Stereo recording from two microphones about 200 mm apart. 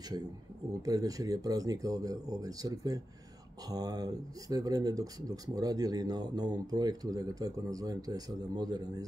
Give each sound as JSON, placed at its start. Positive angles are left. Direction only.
{"t": 0.8, "sound": "speech", "side_deg": -20}